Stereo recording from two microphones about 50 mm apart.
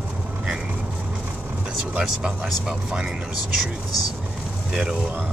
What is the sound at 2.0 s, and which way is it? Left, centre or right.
Speech, centre.